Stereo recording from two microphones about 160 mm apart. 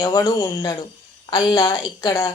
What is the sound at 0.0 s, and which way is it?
A woman's voice, 20° left (ahead or behind).